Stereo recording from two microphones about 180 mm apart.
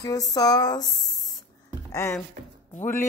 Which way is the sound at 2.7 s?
45° left (ahead or behind).